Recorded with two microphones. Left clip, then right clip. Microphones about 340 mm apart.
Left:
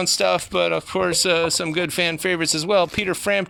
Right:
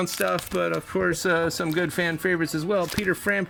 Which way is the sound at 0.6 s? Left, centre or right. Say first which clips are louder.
Left 5 dB; centre.